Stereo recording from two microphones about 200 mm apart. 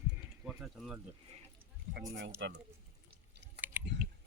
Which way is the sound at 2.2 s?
65° right (ahead or behind).